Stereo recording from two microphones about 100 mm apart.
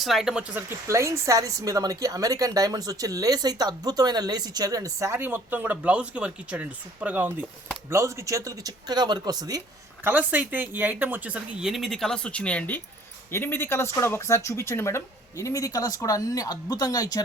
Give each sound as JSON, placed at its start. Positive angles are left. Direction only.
{"t": 0.0, "sound": "speech", "side_deg": 0}
{"t": 0.9, "sound": "a woman's voice", "side_deg": -30}
{"t": 7.9, "sound": "a woman's voice", "side_deg": -30}
{"t": 10.0, "sound": "speech", "side_deg": -20}
{"t": 11.7, "sound": "speech", "side_deg": 0}